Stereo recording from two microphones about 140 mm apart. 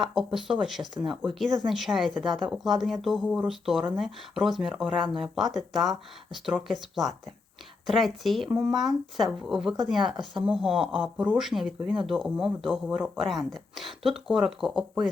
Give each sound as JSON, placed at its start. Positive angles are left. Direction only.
{"t": 0.0, "sound": "speech", "side_deg": 0}
{"t": 1.0, "sound": "speech", "side_deg": -35}
{"t": 1.6, "sound": "speech", "side_deg": 0}
{"t": 2.1, "sound": "speech", "side_deg": -30}
{"t": 2.5, "sound": "speech", "side_deg": 0}